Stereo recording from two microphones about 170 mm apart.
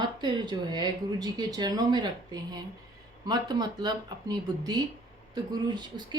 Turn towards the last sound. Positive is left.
turn(degrees=-25)  # may be behind; listen again after turning